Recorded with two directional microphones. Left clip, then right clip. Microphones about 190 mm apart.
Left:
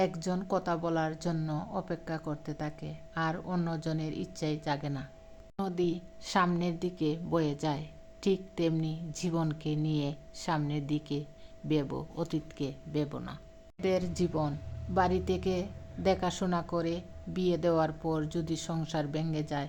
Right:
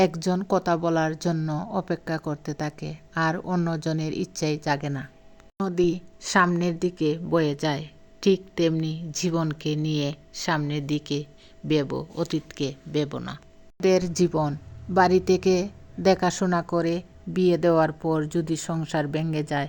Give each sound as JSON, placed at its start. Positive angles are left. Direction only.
{"t": 0.0, "sound": "a woman's voice", "side_deg": -45}
{"t": 13.8, "sound": "a woman's voice", "side_deg": -40}